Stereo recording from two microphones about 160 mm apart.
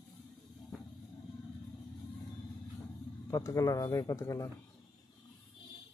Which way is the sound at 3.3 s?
20° left (ahead or behind).